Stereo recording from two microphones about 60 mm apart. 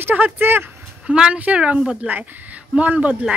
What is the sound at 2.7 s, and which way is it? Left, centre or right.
Speech, right.